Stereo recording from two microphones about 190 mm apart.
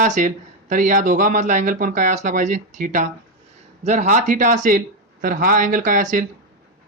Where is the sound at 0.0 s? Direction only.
40° right (ahead or behind).